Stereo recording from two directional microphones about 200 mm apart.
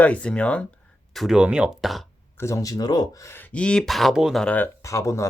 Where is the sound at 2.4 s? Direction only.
15° left (ahead or behind).